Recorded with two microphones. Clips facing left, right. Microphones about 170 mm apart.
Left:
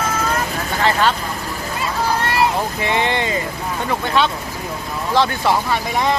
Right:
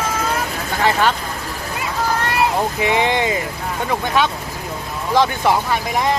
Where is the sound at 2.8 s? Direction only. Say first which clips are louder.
Right 3 dB; 15° right (ahead or behind).